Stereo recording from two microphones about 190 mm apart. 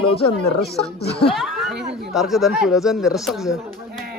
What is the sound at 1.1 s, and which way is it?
Speech, 30° left (ahead or behind).